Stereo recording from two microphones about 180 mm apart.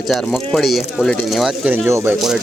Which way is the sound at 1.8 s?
15° right (ahead or behind).